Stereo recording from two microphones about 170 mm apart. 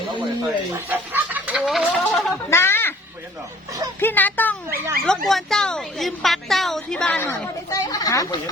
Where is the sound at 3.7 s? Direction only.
20° right (ahead or behind).